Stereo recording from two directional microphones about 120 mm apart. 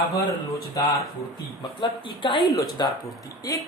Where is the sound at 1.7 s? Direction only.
45° left (ahead or behind).